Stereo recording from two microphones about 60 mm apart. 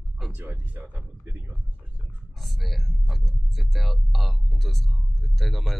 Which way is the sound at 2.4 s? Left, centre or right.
Centre.